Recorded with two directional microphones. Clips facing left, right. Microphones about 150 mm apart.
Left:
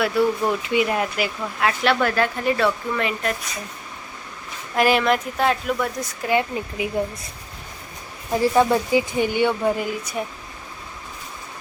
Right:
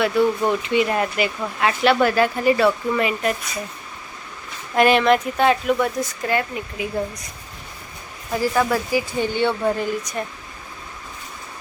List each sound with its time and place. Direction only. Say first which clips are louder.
0.0 s speech: right 1 dB; 5° left (ahead or behind)
4.7 s speech: right 3 dB; 5° left (ahead or behind)
6.2 s speech: left 4 dB; 15° left (ahead or behind)
8.3 s speech: left 2 dB; 25° left (ahead or behind); by 10.2 s 5° left (ahead or behind)